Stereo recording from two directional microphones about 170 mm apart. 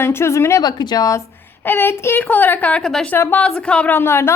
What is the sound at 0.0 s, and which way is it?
A woman's voice, 15° left (ahead or behind).